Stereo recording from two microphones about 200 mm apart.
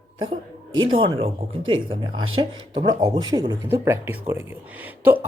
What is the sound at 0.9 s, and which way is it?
Speech, 25° right (ahead or behind).